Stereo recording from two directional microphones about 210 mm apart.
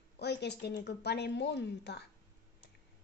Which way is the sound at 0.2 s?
55° left (ahead or behind).